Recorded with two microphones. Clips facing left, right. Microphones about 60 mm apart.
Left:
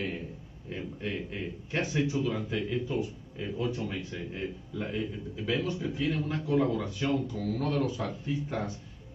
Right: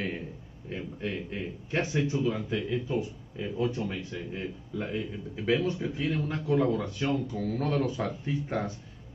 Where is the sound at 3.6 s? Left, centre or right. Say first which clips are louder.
Right 3 dB; right.